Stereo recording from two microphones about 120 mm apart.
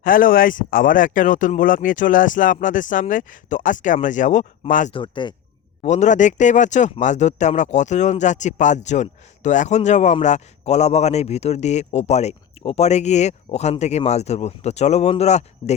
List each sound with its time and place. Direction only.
1.0 s speech: 90° left
4.9 s speech: 40° left (ahead or behind)
5.8 s a man's voice: 80° left